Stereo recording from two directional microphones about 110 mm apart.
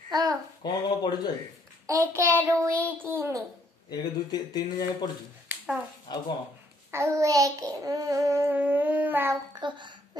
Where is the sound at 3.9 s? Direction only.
40° left (ahead or behind).